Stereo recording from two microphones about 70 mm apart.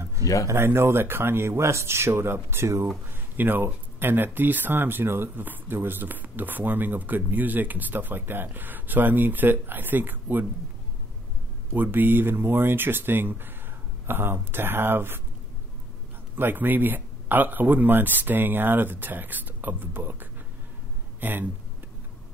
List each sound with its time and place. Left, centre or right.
0.2 s a sound: left
0.5 s speech: right
3.1 s speech: right
11.7 s speech: right
16.3 s speech: right